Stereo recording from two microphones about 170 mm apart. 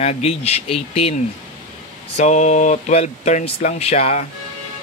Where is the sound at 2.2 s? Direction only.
45° left (ahead or behind).